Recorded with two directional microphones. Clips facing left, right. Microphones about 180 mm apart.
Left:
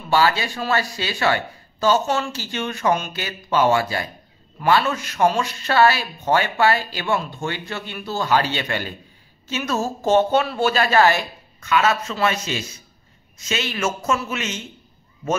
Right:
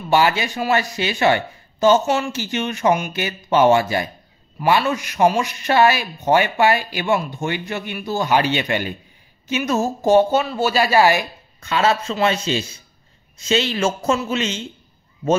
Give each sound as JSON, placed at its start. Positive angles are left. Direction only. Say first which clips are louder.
{"t": 0.1, "sound": "speech", "louder": "right 2 dB", "side_deg": -20}
{"t": 11.6, "sound": "speech", "louder": "right 1 dB", "side_deg": -30}